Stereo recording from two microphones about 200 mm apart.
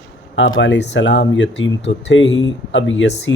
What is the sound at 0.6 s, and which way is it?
Speech, 60° left (ahead or behind).